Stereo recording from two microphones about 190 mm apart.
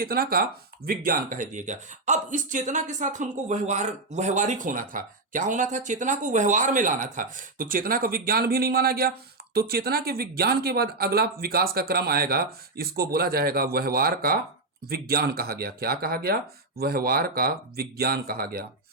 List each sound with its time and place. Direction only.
0.0 s speech: 55° right (ahead or behind)